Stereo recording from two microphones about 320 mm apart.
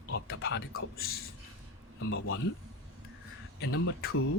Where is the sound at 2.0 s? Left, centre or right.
Left.